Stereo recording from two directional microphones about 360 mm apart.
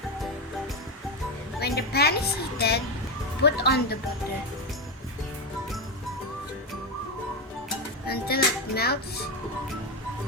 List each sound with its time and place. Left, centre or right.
1.5 s a woman's voice: left
8.0 s a child's voice: left